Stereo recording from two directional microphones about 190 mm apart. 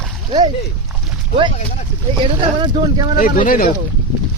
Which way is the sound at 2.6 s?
25° right (ahead or behind).